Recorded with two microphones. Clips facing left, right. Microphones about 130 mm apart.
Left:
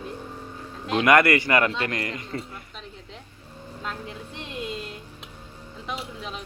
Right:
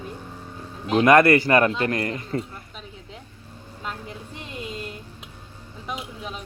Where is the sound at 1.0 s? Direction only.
25° right (ahead or behind).